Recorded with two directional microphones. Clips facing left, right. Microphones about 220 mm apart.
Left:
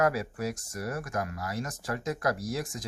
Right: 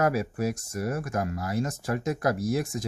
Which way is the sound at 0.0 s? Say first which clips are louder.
Right 2 dB; 25° right (ahead or behind).